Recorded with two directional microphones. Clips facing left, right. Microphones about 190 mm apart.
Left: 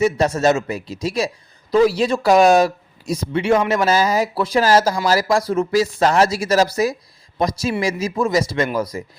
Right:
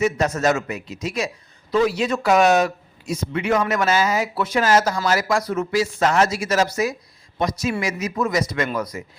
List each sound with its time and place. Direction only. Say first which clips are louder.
0.0 s a man's voice: left 3 dB; 30° left (ahead or behind)